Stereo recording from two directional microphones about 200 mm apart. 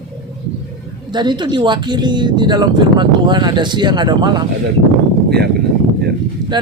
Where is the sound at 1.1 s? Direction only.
20° right (ahead or behind).